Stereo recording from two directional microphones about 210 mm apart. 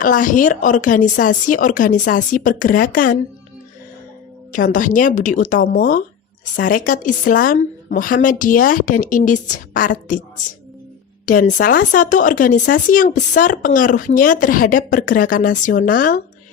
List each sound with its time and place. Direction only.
0.0 s speech: 40° left (ahead or behind)
4.5 s speech: 40° left (ahead or behind)
11.3 s speech: 40° left (ahead or behind)